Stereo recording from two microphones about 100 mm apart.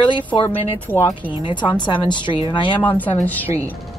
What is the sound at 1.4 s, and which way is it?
A woman's voice, 50° left (ahead or behind).